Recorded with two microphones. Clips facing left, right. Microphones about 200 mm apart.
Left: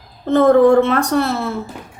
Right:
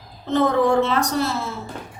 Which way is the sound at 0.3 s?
55° left (ahead or behind).